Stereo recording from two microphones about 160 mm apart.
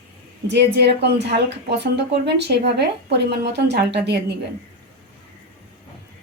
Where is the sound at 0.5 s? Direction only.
90° right.